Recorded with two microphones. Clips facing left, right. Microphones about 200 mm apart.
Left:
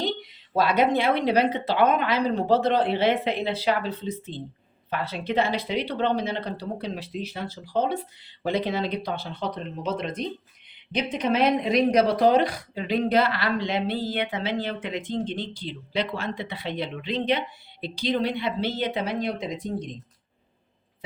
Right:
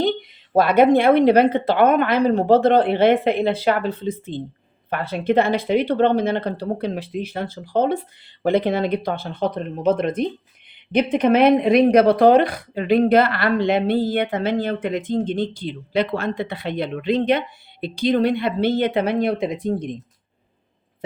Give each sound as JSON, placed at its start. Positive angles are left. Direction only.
{"t": 0.0, "sound": "speech", "side_deg": -55}